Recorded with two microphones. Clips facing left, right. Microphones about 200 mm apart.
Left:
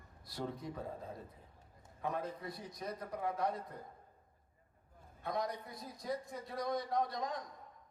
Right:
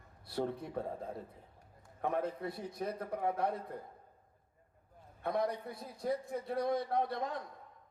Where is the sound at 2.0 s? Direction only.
60° right (ahead or behind).